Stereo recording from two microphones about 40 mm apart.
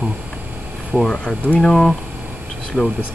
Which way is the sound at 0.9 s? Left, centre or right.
Centre.